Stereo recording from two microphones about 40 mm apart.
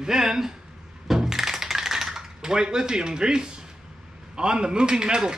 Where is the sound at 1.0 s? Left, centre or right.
Centre.